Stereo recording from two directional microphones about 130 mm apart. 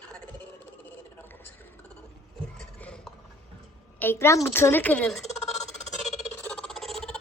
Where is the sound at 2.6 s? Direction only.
5° left (ahead or behind).